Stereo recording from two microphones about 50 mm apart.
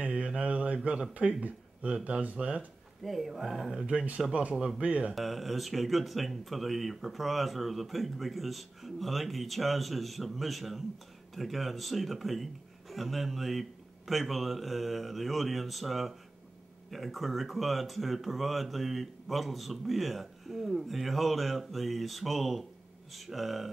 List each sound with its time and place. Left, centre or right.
0.0 s mantra: right
1.4 s speech: right
3.0 s speech: centre
3.8 s speech: right
4.6 s speech: centre
4.8 s speech: right
5.1 s speech: centre